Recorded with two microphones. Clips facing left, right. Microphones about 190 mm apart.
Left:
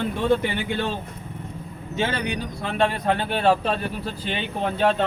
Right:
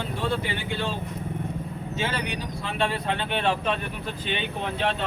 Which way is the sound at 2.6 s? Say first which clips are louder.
Left 4 dB; 50° left (ahead or behind).